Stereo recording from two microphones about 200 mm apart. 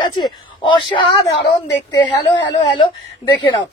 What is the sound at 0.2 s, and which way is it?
A woman's voice, 25° left (ahead or behind).